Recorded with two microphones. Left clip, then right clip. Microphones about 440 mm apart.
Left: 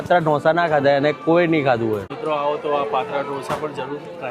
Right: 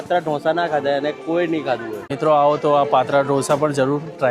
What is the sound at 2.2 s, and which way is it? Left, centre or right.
Speech, right.